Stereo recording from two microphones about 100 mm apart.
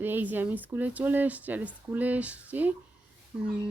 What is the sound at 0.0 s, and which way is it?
Speech, 20° right (ahead or behind).